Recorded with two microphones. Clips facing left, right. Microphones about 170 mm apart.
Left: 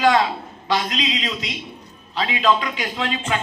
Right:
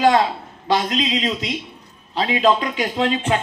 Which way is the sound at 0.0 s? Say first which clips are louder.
Right 2 dB; 45° right (ahead or behind).